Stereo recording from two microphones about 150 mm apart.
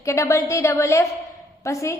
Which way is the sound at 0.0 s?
20° left (ahead or behind).